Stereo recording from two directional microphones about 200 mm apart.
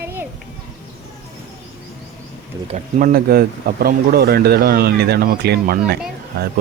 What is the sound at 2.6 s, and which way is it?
Speech, 40° right (ahead or behind).